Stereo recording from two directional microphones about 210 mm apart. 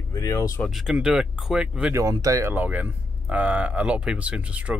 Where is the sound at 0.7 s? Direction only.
Centre (ahead or behind).